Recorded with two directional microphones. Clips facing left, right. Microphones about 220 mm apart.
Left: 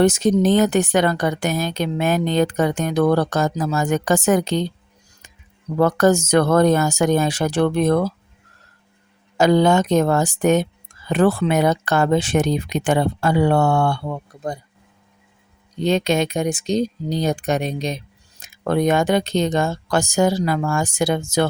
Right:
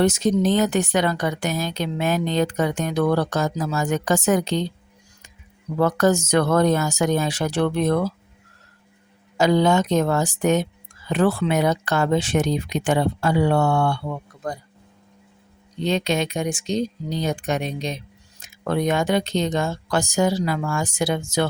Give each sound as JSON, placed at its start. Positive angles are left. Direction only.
{"t": 0.0, "sound": "speech", "side_deg": 50}
{"t": 5.7, "sound": "speech", "side_deg": 50}
{"t": 9.4, "sound": "speech", "side_deg": 50}
{"t": 15.8, "sound": "speech", "side_deg": 45}